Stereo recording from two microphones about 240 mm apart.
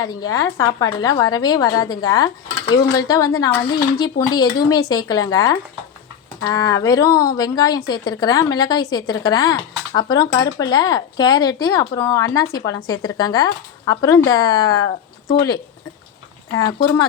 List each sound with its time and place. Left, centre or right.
0.0 s a woman's voice: centre